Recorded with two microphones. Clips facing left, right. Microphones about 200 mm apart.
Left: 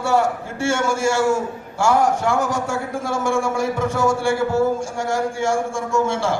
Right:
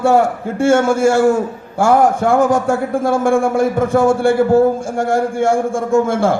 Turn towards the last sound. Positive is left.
turn(degrees=-55)  # may be behind; listen again after turning